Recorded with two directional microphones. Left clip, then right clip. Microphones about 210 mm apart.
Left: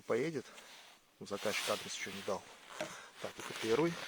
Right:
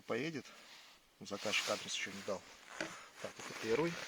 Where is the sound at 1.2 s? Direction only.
15° left (ahead or behind).